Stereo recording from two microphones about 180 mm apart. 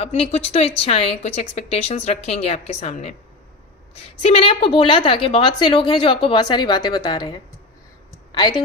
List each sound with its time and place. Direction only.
0.0 s a woman's voice: 35° left (ahead or behind)
4.2 s a woman's voice: 35° left (ahead or behind)
8.4 s a woman's voice: 25° left (ahead or behind)